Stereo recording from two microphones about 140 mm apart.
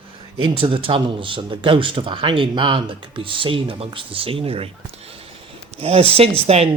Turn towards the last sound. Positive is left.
turn(degrees=-45)  # may be behind; listen again after turning